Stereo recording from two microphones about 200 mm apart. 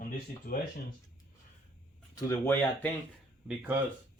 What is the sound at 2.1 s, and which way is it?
Speech, 10° left (ahead or behind).